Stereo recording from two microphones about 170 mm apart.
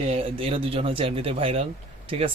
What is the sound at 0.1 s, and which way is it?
Speech, 35° right (ahead or behind).